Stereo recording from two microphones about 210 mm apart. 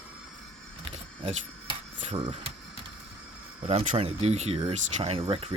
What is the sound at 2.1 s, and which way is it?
Speech, 25° right (ahead or behind).